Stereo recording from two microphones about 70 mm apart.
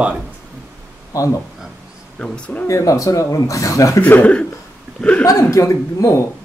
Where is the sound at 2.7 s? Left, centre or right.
Left.